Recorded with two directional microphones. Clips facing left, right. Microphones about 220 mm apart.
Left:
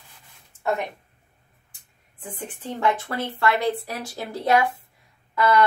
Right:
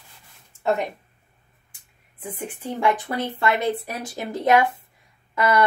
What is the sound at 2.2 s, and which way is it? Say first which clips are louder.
A woman's voice: right 3 dB; 10° right (ahead or behind).